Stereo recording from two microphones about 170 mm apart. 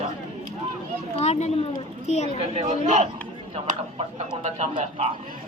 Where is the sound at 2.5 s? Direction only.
40° right (ahead or behind).